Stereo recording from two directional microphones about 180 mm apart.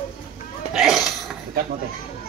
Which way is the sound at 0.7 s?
Centre (ahead or behind).